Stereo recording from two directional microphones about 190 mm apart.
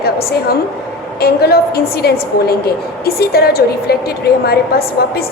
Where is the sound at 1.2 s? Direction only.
55° left (ahead or behind).